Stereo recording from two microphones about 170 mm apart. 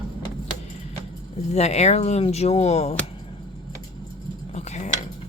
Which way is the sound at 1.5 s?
40° left (ahead or behind).